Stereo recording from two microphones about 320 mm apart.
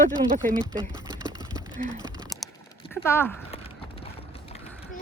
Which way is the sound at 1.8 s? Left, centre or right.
Centre.